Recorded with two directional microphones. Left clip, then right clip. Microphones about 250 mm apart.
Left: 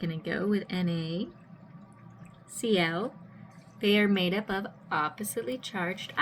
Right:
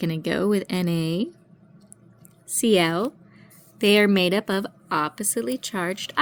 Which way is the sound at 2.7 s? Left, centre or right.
Right.